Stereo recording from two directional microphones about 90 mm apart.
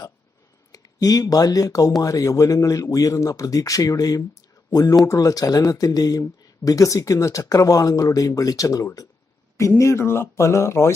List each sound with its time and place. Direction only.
0.7 s speech: 45° left (ahead or behind)